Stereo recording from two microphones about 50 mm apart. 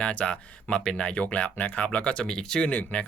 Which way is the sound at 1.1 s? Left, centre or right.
Left.